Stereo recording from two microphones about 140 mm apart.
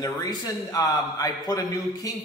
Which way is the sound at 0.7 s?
25° left (ahead or behind).